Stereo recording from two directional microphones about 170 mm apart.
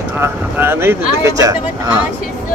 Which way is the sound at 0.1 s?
10° right (ahead or behind).